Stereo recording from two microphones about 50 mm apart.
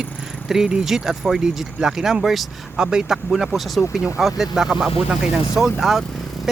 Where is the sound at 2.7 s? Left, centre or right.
Centre.